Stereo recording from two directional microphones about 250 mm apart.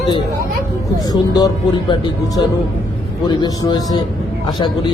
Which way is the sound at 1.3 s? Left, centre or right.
Centre.